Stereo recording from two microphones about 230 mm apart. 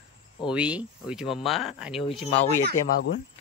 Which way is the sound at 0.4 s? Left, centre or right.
Centre.